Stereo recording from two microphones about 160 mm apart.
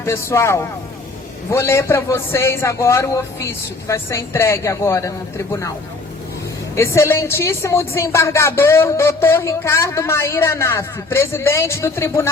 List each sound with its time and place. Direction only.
0.0 s a woman's voice: 15° left (ahead or behind)
6.7 s a woman's voice: 15° left (ahead or behind)